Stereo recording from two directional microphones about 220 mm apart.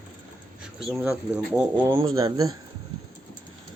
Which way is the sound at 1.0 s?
5° right (ahead or behind).